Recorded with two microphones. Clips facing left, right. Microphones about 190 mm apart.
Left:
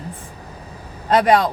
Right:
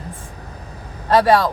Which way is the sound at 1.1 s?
20° left (ahead or behind).